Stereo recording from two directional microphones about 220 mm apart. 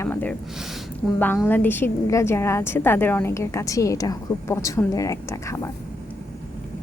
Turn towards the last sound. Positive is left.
turn(degrees=15)  # may be behind; listen again after turning